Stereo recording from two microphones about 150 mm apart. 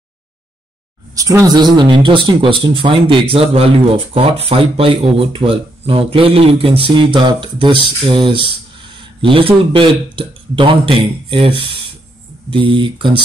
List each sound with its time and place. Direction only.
1.1 s speech: 25° right (ahead or behind)